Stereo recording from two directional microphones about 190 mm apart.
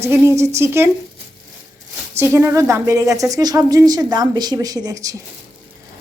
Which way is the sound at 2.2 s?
15° right (ahead or behind).